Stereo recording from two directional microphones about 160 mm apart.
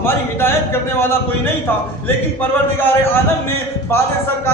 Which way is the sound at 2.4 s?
15° left (ahead or behind).